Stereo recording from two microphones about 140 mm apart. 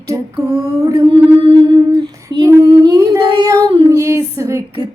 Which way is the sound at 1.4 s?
40° right (ahead or behind).